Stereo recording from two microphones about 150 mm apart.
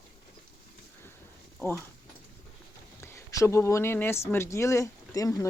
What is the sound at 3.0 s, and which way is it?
Speech, 20° left (ahead or behind).